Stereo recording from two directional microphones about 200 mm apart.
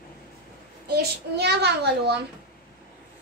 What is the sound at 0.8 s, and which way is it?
A child's voice, 50° right (ahead or behind).